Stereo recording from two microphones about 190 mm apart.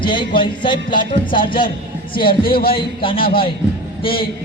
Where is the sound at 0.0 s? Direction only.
25° left (ahead or behind).